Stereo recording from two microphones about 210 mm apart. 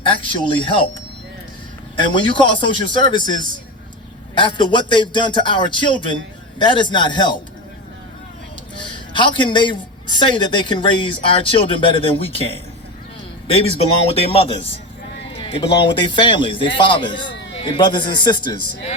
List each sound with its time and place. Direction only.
0.1 s a man's voice: 25° left (ahead or behind)
2.0 s a man's voice: 25° left (ahead or behind)
8.8 s a man's voice: 20° left (ahead or behind)
14.1 s a man's voice: 30° left (ahead or behind)
15.3 s a sound: 25° left (ahead or behind)
16.0 s a man's voice: 25° left (ahead or behind)